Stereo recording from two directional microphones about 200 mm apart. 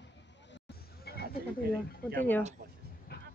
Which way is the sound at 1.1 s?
55° left (ahead or behind).